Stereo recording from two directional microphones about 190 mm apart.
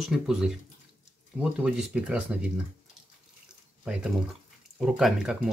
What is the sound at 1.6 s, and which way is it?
Speech, 5° right (ahead or behind).